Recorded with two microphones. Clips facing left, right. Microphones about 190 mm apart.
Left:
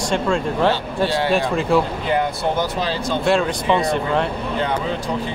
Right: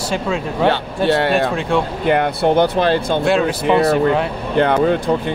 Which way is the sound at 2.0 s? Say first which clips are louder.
Right 5 dB; 60° right (ahead or behind).